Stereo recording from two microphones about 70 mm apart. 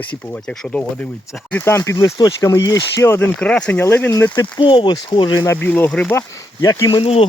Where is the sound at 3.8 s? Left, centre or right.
Left.